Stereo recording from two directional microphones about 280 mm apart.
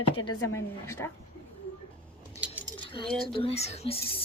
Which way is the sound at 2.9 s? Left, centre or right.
Centre.